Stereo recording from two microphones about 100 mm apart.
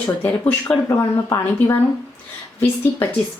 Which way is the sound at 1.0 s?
30° left (ahead or behind).